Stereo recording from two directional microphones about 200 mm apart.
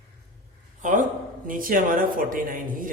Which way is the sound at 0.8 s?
40° right (ahead or behind).